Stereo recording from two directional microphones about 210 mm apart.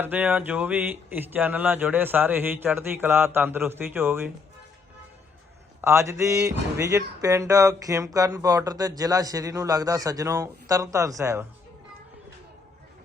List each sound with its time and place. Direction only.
0.0 s speech: 10° right (ahead or behind)
5.8 s speech: 15° right (ahead or behind)